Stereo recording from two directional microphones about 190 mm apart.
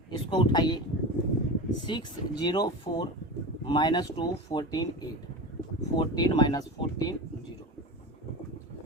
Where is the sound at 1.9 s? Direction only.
20° left (ahead or behind).